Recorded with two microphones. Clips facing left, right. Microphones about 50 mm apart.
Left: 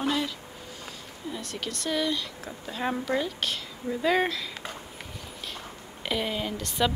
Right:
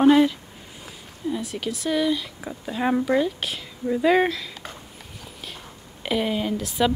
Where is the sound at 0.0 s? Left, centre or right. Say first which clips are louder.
Right 12 dB; right.